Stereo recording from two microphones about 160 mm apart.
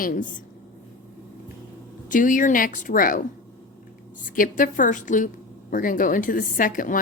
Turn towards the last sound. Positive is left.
turn(degrees=60)  # may be behind; listen again after turning